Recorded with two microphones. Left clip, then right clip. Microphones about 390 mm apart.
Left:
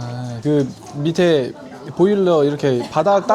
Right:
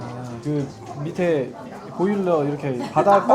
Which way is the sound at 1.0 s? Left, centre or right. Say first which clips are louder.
Left 6 dB; left.